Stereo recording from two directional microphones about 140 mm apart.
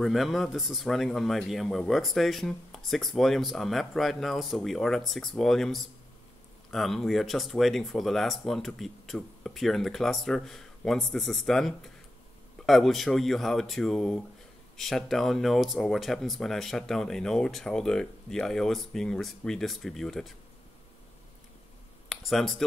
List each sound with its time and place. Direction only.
0.0 s a man's voice: centre (ahead or behind)
22.1 s speech: centre (ahead or behind)